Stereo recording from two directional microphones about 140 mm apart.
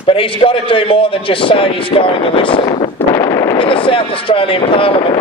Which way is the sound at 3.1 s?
20° left (ahead or behind).